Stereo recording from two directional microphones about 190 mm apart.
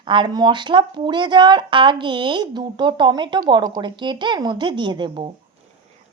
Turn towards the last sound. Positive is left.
turn(degrees=-25)  # may be behind; listen again after turning